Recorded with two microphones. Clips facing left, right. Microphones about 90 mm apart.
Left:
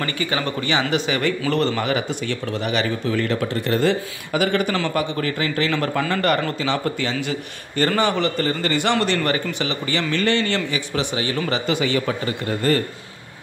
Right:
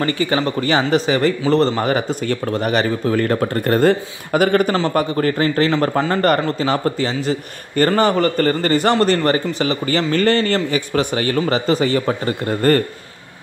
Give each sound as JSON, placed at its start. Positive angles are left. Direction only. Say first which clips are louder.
{"t": 0.0, "sound": "a man's voice", "louder": "right 6 dB", "side_deg": -35}
{"t": 4.7, "sound": "a man's voice", "louder": "right 5 dB", "side_deg": -35}